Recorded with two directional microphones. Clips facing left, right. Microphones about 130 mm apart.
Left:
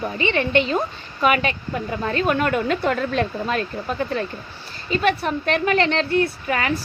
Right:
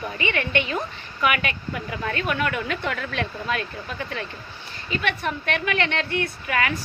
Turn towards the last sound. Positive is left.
turn(degrees=35)  # may be behind; listen again after turning